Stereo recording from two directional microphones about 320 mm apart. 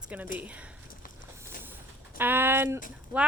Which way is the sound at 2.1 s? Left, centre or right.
Centre.